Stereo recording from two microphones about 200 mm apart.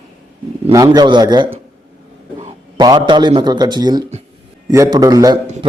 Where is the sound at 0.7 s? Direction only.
20° right (ahead or behind).